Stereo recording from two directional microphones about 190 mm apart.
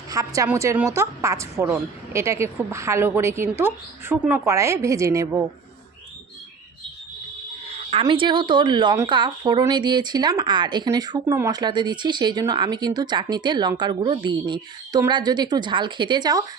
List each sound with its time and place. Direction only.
0.1 s a woman's voice: 15° right (ahead or behind)
7.9 s speech: 30° right (ahead or behind)